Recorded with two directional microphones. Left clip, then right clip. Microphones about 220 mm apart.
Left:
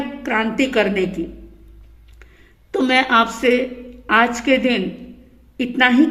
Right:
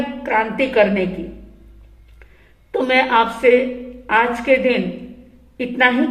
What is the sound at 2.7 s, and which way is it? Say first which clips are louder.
A woman's voice: even; 45° left (ahead or behind).